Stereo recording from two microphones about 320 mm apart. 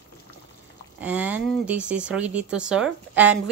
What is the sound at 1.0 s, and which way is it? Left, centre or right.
A woman's voice, centre.